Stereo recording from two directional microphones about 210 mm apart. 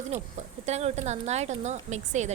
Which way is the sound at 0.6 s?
30° right (ahead or behind).